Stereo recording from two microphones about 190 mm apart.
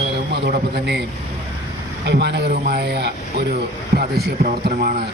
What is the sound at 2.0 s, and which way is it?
A man's voice, 60° right (ahead or behind).